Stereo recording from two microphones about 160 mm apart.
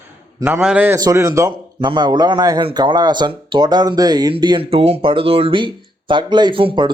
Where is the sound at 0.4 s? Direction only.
10° right (ahead or behind).